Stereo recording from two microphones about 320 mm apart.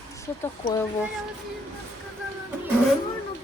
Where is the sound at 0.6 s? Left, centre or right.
Centre.